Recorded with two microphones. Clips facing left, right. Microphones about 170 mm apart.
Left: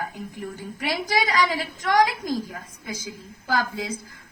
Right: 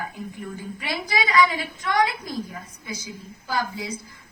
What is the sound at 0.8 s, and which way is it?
A woman's voice, 45° left (ahead or behind).